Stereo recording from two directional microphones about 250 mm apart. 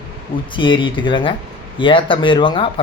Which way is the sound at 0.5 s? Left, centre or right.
Centre.